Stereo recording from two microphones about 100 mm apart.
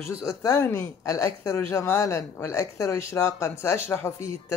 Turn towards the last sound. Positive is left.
turn(degrees=25)  # may be behind; listen again after turning